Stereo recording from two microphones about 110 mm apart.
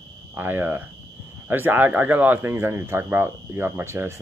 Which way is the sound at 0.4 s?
20° right (ahead or behind).